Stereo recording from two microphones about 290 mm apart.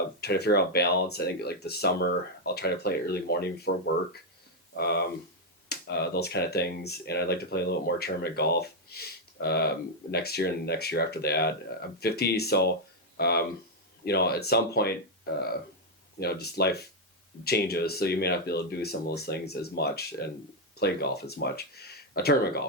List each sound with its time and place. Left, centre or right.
0.2 s speech: left
4.8 s speech: left
16.2 s speech: left